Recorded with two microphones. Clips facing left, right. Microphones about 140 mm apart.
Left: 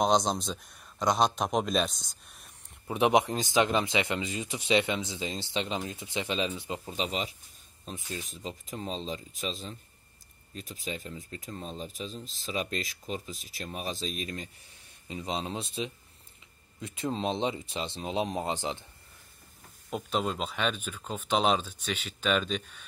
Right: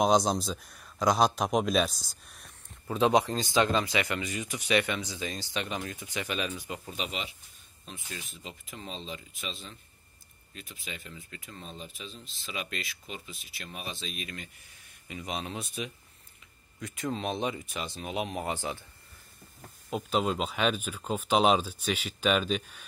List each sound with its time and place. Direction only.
0.0 s speech: 5° right (ahead or behind)
2.9 s speech: 20° left (ahead or behind)
7.1 s speech: 35° left (ahead or behind); by 18.9 s 20° left (ahead or behind)
19.9 s speech: 5° right (ahead or behind)